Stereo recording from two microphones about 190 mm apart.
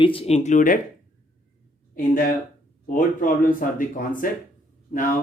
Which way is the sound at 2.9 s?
45° left (ahead or behind).